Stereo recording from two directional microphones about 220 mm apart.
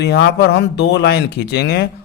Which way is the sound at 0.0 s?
50° left (ahead or behind).